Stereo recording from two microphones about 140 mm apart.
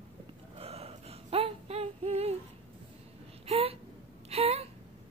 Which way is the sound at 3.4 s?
45° right (ahead or behind).